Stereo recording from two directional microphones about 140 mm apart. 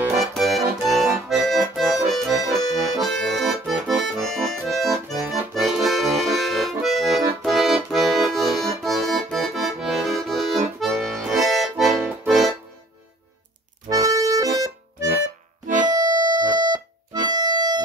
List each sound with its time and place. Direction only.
0.2 s accordion: centre (ahead or behind)
13.8 s accordion: 25° right (ahead or behind)
15.6 s music: 60° right (ahead or behind)
16.1 s music: 30° right (ahead or behind)